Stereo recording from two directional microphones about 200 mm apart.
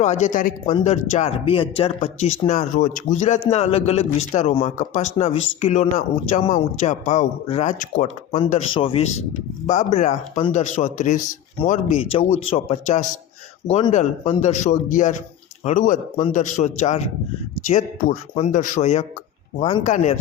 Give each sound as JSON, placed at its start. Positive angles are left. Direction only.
{"t": 0.0, "sound": "a man's voice", "side_deg": 35}
{"t": 8.7, "sound": "speech", "side_deg": 25}
{"t": 9.6, "sound": "a man's voice", "side_deg": 35}